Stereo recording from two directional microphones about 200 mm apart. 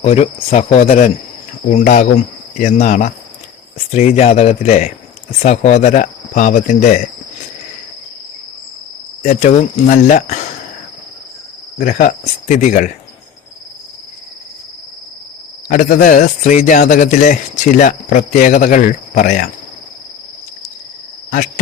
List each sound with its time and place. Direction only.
0.0 s a man's voice: 30° left (ahead or behind)
9.2 s a man's voice: 35° left (ahead or behind)
11.8 s a man's voice: 40° left (ahead or behind)
15.7 s a man's voice: 45° left (ahead or behind)
21.2 s cricket: 40° left (ahead or behind)